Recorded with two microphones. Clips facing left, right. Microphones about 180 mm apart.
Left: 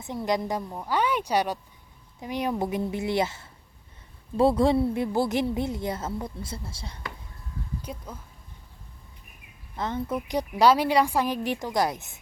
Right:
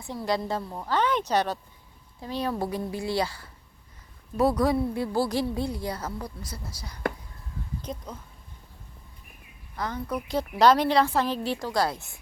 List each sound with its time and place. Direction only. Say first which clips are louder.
0.3 s a woman's voice: left 1 dB; 15° left (ahead or behind)
7.8 s speech: right 2 dB; 10° left (ahead or behind)
9.7 s a woman's voice: left 2 dB; 25° left (ahead or behind)